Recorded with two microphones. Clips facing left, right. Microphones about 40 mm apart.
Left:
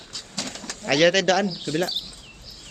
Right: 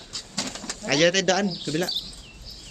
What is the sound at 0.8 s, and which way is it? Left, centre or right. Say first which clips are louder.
Speech: left 2 dB; centre.